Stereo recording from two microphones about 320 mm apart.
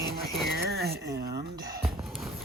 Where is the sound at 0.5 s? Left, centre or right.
Right.